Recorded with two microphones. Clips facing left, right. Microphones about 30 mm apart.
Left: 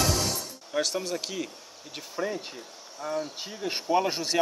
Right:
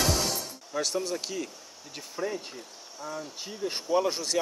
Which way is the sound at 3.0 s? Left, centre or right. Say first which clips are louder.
Left 6 dB; left.